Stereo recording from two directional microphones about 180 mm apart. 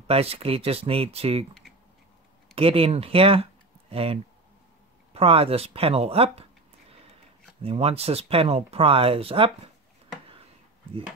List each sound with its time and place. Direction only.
0.0 s speech: 35° right (ahead or behind)
2.5 s speech: 30° right (ahead or behind)
7.6 s speech: 35° right (ahead or behind)